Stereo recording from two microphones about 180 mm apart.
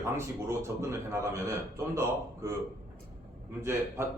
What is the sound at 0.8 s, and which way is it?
Speech, 15° right (ahead or behind).